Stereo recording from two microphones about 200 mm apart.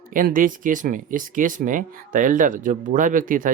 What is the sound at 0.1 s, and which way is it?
Speech, 45° right (ahead or behind).